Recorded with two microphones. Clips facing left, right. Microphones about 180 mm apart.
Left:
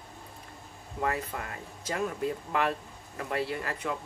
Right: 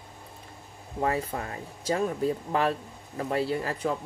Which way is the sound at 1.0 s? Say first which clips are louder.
Right 4 dB; 30° right (ahead or behind).